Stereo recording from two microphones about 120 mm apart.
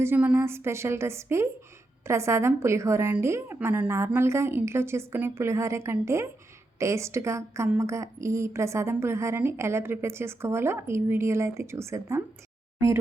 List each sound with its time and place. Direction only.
0.0 s a woman's voice: 15° right (ahead or behind)